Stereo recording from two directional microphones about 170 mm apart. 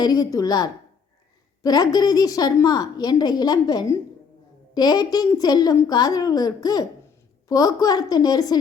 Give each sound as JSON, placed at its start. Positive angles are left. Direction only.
{"t": 0.0, "sound": "a woman's voice", "side_deg": 20}